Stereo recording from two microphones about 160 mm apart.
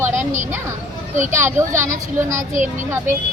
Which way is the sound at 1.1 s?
50° right (ahead or behind).